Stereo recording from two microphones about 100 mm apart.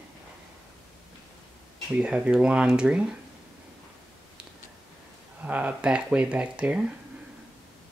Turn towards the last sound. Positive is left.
turn(degrees=-10)  # may be behind; listen again after turning